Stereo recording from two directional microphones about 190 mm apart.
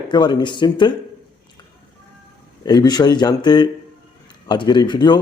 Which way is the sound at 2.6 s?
20° left (ahead or behind).